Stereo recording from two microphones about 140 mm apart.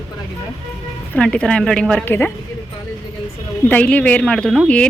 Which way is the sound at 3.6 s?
10° left (ahead or behind).